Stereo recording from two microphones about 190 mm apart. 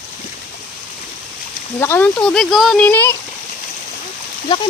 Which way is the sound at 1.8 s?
10° left (ahead or behind).